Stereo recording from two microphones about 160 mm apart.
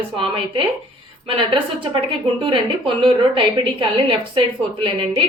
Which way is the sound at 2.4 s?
30° right (ahead or behind).